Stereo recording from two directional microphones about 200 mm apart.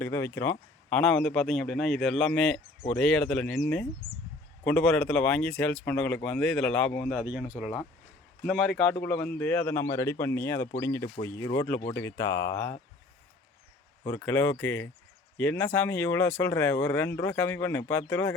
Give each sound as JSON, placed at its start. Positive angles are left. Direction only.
{"t": 0.0, "sound": "speech", "side_deg": 15}
{"t": 4.6, "sound": "speech", "side_deg": 5}
{"t": 14.0, "sound": "speech", "side_deg": 10}